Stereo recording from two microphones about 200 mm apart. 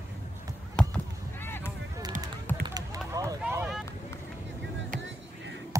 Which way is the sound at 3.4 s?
5° right (ahead or behind).